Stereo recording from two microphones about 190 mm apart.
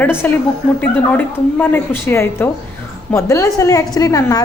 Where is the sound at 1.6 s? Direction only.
10° left (ahead or behind).